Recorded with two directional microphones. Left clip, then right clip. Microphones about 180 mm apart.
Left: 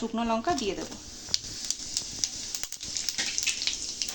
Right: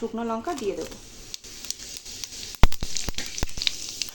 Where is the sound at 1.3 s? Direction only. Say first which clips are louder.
Left 10 dB; 45° right (ahead or behind).